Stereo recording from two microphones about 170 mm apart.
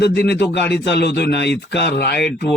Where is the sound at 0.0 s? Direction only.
75° left (ahead or behind).